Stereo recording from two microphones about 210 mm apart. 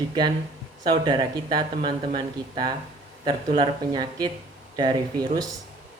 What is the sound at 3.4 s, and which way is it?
Speech, 25° right (ahead or behind).